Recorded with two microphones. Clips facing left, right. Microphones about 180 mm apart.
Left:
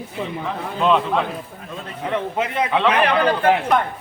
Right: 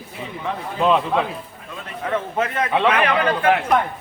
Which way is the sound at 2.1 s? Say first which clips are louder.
Even; 15° left (ahead or behind).